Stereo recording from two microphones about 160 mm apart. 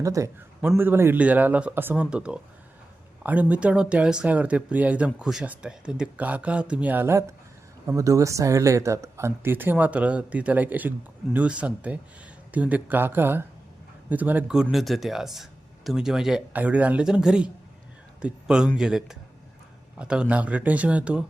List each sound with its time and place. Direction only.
0.0 s a man's voice: 20° right (ahead or behind)